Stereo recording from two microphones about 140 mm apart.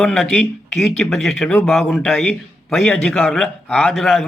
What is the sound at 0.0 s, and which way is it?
Speech, 5° left (ahead or behind).